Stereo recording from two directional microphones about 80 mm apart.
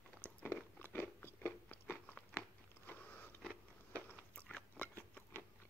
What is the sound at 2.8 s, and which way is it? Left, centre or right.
Biting, left.